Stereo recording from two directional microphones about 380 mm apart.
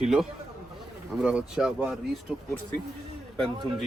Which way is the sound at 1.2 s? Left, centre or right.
Centre.